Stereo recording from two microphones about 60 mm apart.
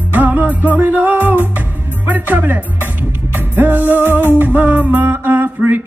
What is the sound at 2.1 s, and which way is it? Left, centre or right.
Speech, right.